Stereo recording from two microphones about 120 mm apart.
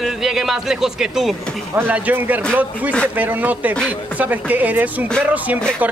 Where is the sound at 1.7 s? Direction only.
15° right (ahead or behind).